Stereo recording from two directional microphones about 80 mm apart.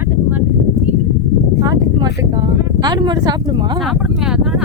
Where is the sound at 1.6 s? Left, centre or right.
Right.